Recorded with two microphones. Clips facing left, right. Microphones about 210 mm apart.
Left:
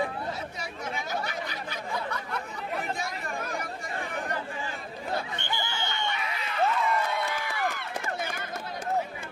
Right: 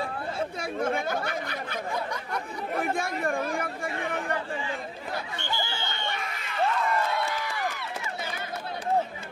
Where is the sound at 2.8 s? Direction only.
55° right (ahead or behind).